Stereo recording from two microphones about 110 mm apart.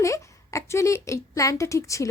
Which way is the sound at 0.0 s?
30° left (ahead or behind).